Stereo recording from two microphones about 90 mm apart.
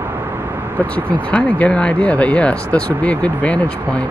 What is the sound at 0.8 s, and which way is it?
Speech, 15° left (ahead or behind).